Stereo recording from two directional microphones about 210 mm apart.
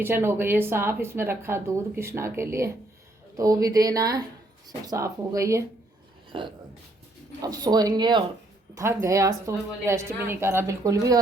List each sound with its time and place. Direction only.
0.0 s speech: 10° right (ahead or behind)